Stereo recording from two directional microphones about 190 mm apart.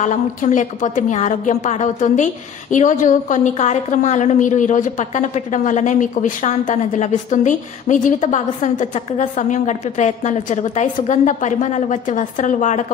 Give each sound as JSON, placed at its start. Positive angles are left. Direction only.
{"t": 0.0, "sound": "a woman's voice", "side_deg": 40}